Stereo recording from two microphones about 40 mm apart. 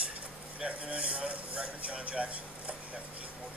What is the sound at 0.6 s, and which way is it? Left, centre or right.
Speech, right.